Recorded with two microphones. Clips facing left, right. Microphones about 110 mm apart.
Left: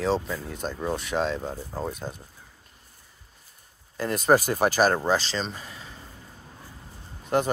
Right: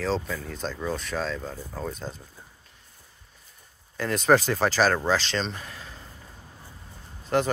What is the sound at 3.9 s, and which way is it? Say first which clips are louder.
Speech: even; 5° left (ahead or behind).